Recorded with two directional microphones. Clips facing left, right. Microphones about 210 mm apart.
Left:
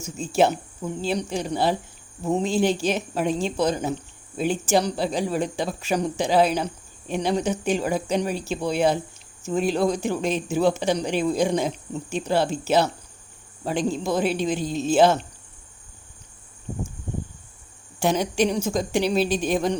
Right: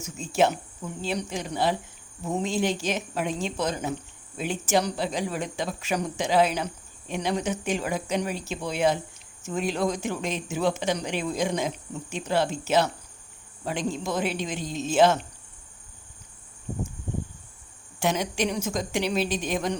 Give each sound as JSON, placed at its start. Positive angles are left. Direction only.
{"t": 0.0, "sound": "speech", "side_deg": 30}
{"t": 18.0, "sound": "speech", "side_deg": 35}